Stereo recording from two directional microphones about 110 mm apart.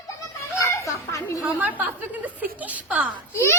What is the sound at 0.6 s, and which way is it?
Children playing, 30° left (ahead or behind).